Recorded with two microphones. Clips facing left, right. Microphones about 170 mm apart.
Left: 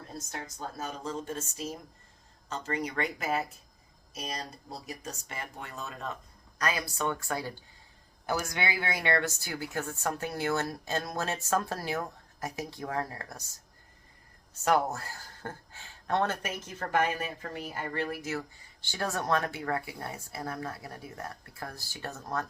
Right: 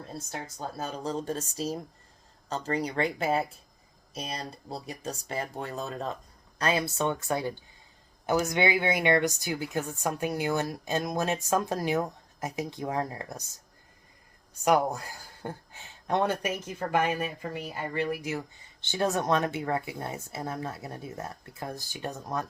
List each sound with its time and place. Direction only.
0.3 s speech: 30° right (ahead or behind)
4.7 s a woman's voice: 35° right (ahead or behind)
14.6 s speech: 15° right (ahead or behind)